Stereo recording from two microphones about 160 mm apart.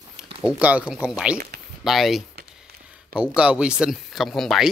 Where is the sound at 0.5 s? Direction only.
10° right (ahead or behind).